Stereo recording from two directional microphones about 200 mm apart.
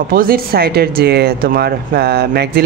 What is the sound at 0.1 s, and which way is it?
Speech, 45° right (ahead or behind).